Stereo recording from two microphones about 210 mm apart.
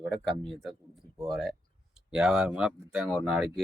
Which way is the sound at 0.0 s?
Centre (ahead or behind).